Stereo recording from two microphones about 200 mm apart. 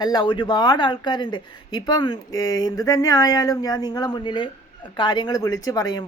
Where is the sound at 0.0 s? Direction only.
20° left (ahead or behind).